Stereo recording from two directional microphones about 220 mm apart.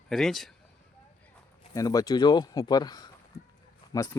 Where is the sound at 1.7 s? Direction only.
15° left (ahead or behind).